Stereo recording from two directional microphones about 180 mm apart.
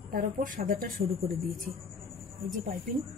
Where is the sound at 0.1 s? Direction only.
50° right (ahead or behind).